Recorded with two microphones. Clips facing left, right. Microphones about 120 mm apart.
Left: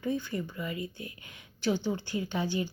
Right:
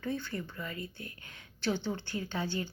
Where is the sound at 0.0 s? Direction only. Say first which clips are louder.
Left 4 dB; 15° left (ahead or behind).